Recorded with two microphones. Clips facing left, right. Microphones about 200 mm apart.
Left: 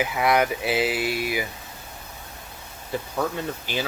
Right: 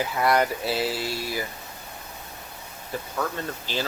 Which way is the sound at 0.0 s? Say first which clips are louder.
Left 1 dB; 10° left (ahead or behind).